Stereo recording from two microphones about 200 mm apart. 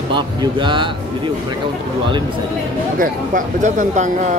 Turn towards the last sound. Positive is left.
turn(degrees=-40)  # may be behind; listen again after turning